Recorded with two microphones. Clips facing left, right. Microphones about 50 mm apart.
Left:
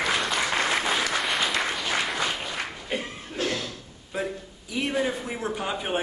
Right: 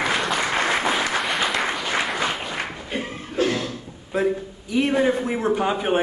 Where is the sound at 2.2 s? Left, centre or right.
Centre.